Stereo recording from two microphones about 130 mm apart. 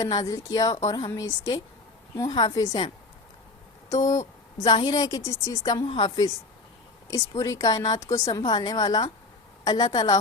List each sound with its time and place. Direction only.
0.0 s a woman's voice: 25° left (ahead or behind)
7.1 s a woman's voice: 25° left (ahead or behind)